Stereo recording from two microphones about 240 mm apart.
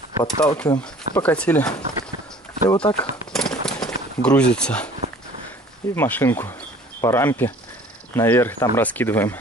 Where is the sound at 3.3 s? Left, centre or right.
Centre.